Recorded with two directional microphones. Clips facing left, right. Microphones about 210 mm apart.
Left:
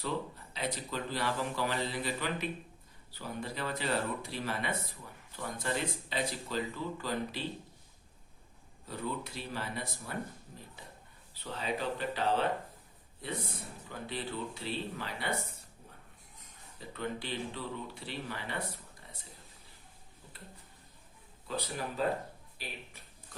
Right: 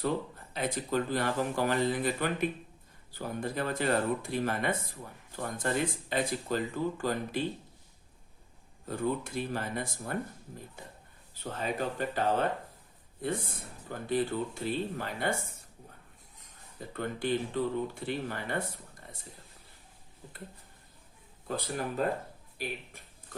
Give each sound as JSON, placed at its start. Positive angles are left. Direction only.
{"t": 0.5, "sound": "speech", "side_deg": -50}
{"t": 8.9, "sound": "speech", "side_deg": -50}
{"t": 14.1, "sound": "speech", "side_deg": -45}
{"t": 16.9, "sound": "speech", "side_deg": -50}
{"t": 21.4, "sound": "speech", "side_deg": -50}